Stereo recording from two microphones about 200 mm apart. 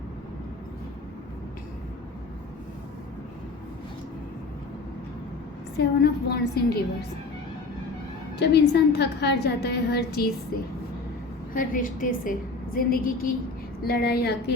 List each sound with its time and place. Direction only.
5.7 s a woman's voice: 55° left (ahead or behind)
8.4 s a woman's voice: 55° left (ahead or behind)